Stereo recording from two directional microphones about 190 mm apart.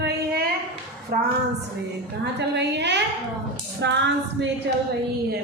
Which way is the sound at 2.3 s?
65° right (ahead or behind).